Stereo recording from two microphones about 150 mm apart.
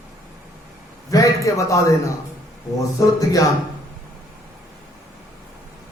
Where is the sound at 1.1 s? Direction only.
20° left (ahead or behind).